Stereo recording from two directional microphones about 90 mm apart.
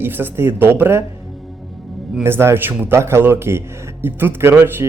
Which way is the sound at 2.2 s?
30° right (ahead or behind).